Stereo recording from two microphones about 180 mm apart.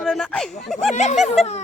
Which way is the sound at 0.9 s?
40° left (ahead or behind).